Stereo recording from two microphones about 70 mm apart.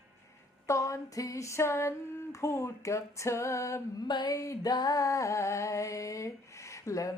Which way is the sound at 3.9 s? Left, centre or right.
Left.